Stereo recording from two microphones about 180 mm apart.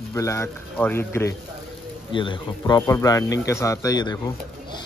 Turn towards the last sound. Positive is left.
turn(degrees=20)  # may be behind; listen again after turning